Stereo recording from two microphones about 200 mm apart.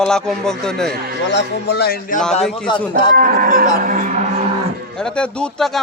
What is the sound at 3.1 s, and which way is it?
Speech, 45° right (ahead or behind).